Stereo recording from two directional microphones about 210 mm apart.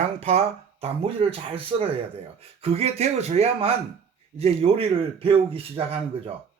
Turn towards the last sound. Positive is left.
turn(degrees=-25)  # may be behind; listen again after turning